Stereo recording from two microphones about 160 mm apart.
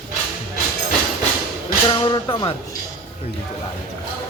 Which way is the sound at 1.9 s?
30° left (ahead or behind).